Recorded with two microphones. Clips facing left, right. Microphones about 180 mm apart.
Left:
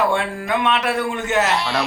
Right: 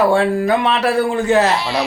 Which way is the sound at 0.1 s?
35° right (ahead or behind).